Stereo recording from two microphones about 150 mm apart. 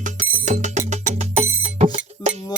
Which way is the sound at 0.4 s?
50° right (ahead or behind).